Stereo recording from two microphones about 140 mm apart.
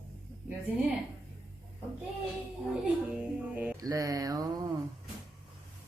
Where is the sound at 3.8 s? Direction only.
25° right (ahead or behind).